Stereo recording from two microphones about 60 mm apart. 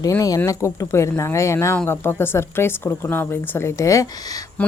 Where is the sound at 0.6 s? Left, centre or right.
Left.